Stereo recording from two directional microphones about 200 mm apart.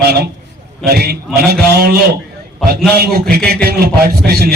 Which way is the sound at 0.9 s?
50° right (ahead or behind).